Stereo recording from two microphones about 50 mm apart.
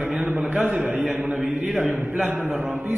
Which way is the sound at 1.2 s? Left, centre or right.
Right.